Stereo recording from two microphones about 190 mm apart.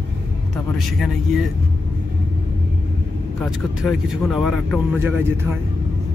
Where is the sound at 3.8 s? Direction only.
Centre (ahead or behind).